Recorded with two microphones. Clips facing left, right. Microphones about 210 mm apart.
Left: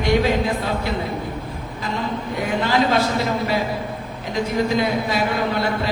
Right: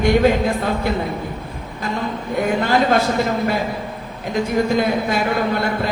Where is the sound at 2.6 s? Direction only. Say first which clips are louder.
Even; 50° right (ahead or behind).